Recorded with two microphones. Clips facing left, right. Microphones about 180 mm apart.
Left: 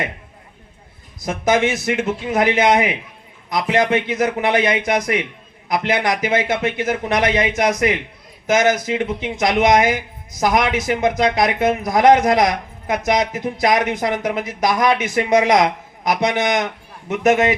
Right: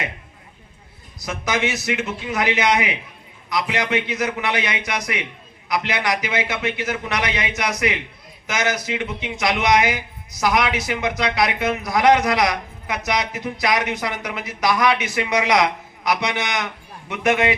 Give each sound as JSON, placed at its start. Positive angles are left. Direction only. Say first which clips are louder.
{"t": 1.2, "sound": "a man's voice", "louder": "left 6 dB", "side_deg": 50}